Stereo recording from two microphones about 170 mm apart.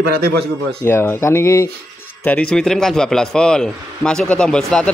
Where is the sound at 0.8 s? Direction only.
15° left (ahead or behind).